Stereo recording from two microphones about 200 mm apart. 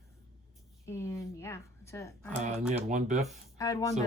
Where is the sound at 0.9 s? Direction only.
15° left (ahead or behind).